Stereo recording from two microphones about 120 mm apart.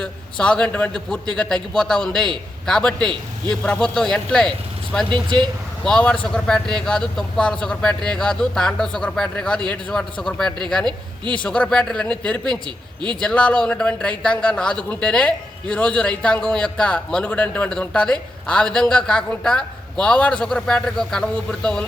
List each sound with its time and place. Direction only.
0.0 s a man's voice: 10° left (ahead or behind)
5.0 s speech: 40° right (ahead or behind)
5.8 s speech: 10° left (ahead or behind)